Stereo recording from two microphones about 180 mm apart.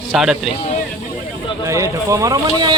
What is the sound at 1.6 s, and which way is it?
Speech, 15° right (ahead or behind).